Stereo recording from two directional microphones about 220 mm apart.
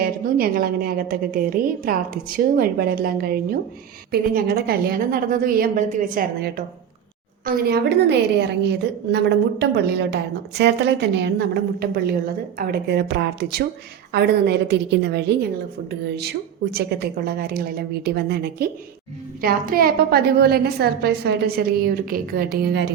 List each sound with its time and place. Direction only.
0.0 s a woman's voice: 40° right (ahead or behind)
16.7 s a woman's voice: 45° right (ahead or behind)